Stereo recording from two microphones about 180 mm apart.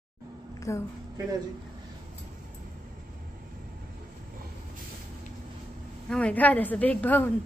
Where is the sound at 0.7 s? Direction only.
15° left (ahead or behind).